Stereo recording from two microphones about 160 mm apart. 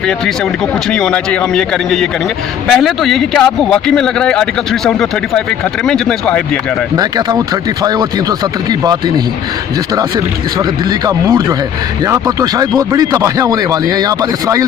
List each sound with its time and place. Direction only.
0.9 s speech: 5° left (ahead or behind)
7.0 s speech: 25° right (ahead or behind)
9.9 s speech: 25° right (ahead or behind)